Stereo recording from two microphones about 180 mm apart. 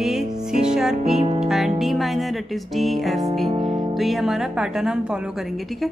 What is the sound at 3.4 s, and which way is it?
Music, 35° right (ahead or behind).